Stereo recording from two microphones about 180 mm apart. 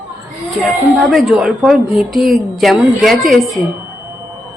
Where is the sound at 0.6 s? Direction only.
5° left (ahead or behind).